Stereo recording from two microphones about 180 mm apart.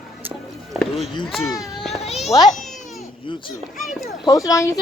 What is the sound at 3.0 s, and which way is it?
Baby cry, 30° left (ahead or behind).